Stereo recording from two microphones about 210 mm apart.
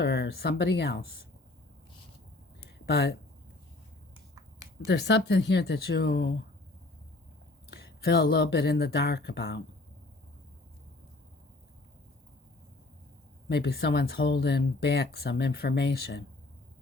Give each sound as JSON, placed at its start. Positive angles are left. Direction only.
{"t": 0.0, "sound": "speech", "side_deg": 50}
{"t": 2.8, "sound": "speech", "side_deg": 50}
{"t": 4.9, "sound": "speech", "side_deg": 55}
{"t": 7.7, "sound": "speech", "side_deg": 55}
{"t": 13.5, "sound": "speech", "side_deg": 55}